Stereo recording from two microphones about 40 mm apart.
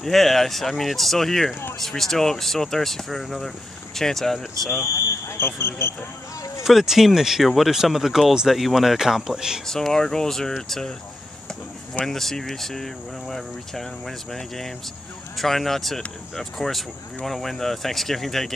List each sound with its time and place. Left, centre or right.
0.0 s speech: centre
5.4 s speech: left
6.6 s speech: centre
9.7 s speech: centre
12.1 s speech: centre